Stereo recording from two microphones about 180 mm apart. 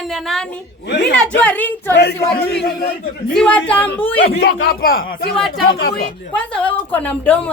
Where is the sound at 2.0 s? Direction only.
65° left (ahead or behind).